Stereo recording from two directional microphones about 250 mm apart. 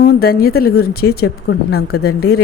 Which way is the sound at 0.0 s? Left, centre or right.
Left.